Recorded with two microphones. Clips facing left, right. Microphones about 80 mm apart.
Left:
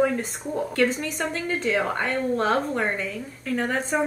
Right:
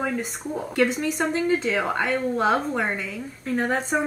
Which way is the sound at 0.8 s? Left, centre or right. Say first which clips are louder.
Right 3 dB; centre.